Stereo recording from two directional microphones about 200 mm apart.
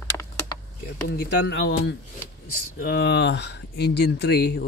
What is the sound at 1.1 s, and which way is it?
Speech, 55° left (ahead or behind).